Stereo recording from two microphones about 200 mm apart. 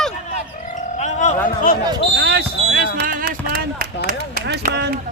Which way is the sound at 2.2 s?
55° right (ahead or behind).